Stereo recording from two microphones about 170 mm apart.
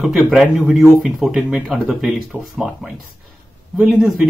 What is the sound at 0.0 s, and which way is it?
Speech, 5° right (ahead or behind).